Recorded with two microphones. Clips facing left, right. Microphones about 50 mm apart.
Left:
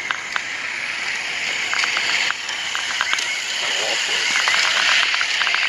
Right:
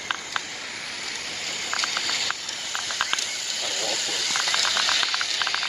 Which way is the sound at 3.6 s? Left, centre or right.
Left.